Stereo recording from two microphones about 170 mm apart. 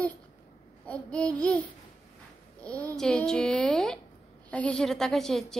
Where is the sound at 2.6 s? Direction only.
10° left (ahead or behind).